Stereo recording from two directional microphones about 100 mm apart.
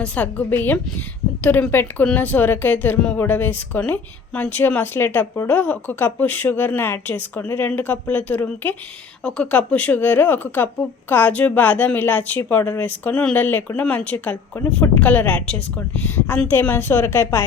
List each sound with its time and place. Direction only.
0.0 s a woman's voice: 15° left (ahead or behind)